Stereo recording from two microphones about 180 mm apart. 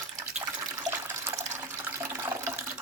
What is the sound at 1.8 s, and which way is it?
Toilet flush, 15° right (ahead or behind).